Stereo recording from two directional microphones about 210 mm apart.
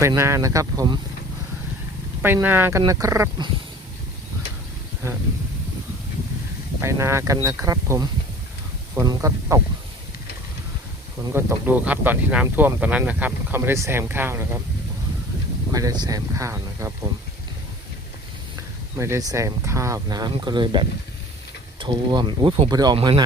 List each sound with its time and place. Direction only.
0.0 s speech: 15° right (ahead or behind)
2.2 s speech: 10° right (ahead or behind)
6.8 s speech: 10° right (ahead or behind)
11.3 s speech: 10° right (ahead or behind)
15.7 s speech: 20° right (ahead or behind)
18.9 s speech: 15° right (ahead or behind)